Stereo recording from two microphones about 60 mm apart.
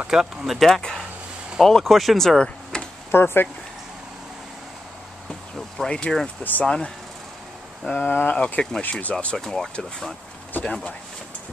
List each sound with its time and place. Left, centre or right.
0.1 s speech: centre
3.1 s speech: left
5.3 s vehicle: centre
6.6 s speech: centre